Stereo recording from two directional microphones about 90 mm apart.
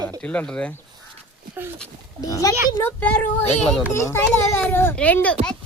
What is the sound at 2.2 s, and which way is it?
Speech, 40° left (ahead or behind).